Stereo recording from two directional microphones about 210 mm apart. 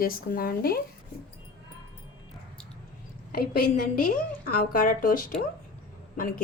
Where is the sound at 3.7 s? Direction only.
45° left (ahead or behind).